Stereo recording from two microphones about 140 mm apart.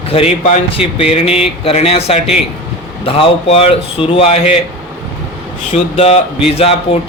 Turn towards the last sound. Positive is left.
turn(degrees=45)  # may be behind; listen again after turning